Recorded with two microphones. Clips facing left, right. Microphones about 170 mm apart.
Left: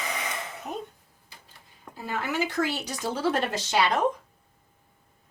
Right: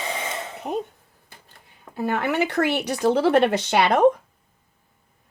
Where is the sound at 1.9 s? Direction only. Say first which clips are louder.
Right 7 dB; 60° right (ahead or behind).